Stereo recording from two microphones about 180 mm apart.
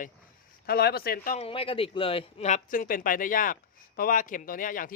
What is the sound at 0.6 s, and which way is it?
Speech, 60° left (ahead or behind).